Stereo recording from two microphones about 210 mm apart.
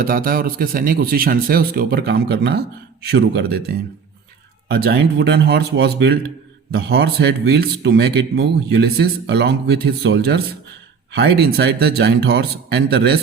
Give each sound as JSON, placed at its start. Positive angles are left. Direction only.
{"t": 0.0, "sound": "speech", "side_deg": -45}